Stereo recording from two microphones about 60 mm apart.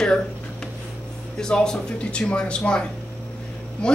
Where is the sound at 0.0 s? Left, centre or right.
Centre.